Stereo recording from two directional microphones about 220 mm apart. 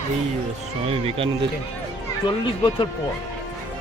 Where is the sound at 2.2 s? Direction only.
25° left (ahead or behind).